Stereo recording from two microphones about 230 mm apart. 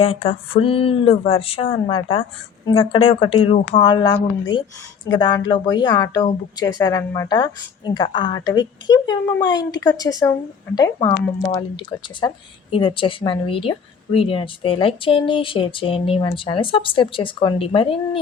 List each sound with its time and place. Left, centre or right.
0.0 s a woman's voice: left